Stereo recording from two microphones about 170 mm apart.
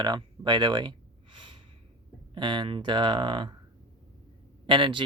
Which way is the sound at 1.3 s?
30° right (ahead or behind).